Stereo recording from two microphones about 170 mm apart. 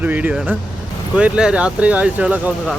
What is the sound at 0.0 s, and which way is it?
Speech, 10° right (ahead or behind).